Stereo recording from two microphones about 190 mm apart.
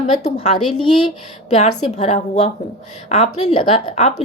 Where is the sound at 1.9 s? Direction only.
35° left (ahead or behind).